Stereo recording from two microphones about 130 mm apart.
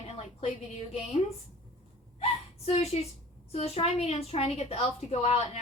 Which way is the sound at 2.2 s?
55° left (ahead or behind).